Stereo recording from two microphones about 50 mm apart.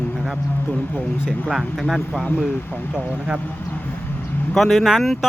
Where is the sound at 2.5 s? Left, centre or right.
Left.